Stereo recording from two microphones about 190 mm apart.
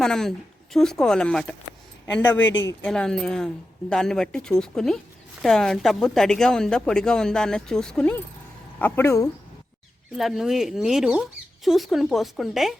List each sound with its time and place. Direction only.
0.0 s speech: 5° left (ahead or behind)
10.2 s speech: centre (ahead or behind)